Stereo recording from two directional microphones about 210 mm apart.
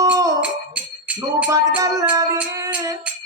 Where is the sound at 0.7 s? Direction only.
5° right (ahead or behind).